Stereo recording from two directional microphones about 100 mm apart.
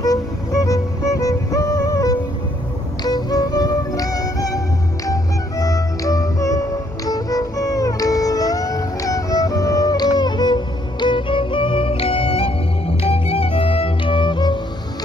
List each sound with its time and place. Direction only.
0.0 s music: 35° left (ahead or behind); by 14.6 s 50° left (ahead or behind)